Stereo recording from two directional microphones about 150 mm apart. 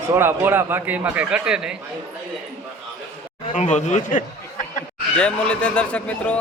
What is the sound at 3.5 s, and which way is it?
Speech, 50° left (ahead or behind).